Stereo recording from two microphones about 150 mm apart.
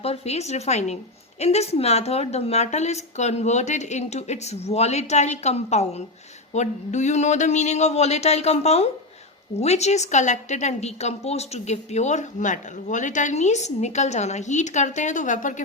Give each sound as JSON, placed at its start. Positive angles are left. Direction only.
{"t": 0.0, "sound": "a woman's voice", "side_deg": 45}